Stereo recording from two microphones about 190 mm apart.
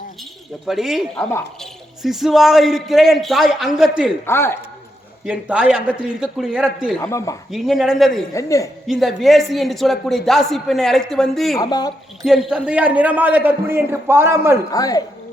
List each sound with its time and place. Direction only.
0.6 s a man's voice: centre (ahead or behind)
4.3 s a man's voice: 10° left (ahead or behind)
5.2 s a man's voice: 5° right (ahead or behind)
7.0 s a man's voice: 15° left (ahead or behind)
7.5 s a man's voice: centre (ahead or behind)
8.3 s a man's voice: 15° left (ahead or behind)
8.9 s a man's voice: centre (ahead or behind)
11.5 s speech: 20° left (ahead or behind)
12.2 s a man's voice: centre (ahead or behind)
14.7 s speech: 20° left (ahead or behind)